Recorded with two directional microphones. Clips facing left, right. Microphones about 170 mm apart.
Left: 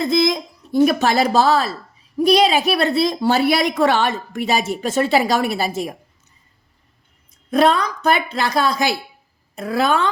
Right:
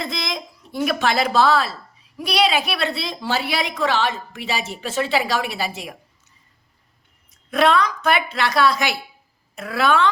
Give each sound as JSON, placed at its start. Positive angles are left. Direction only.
{"t": 0.0, "sound": "a woman's voice", "side_deg": 40}
{"t": 7.5, "sound": "a woman's voice", "side_deg": 40}